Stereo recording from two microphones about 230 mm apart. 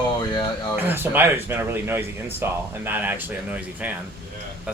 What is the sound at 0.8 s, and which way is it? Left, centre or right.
Speech, centre.